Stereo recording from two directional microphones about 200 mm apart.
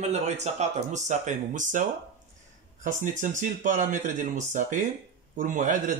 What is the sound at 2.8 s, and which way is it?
Speech, 40° right (ahead or behind).